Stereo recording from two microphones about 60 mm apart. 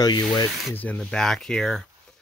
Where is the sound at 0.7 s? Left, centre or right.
Left.